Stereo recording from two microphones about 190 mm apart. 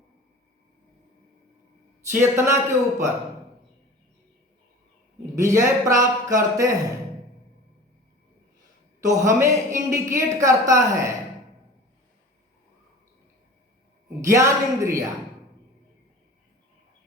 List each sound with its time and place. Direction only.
2.0 s speech: 15° right (ahead or behind)
5.4 s speech: 15° right (ahead or behind)
9.0 s speech: 15° right (ahead or behind)
14.2 s speech: 15° right (ahead or behind)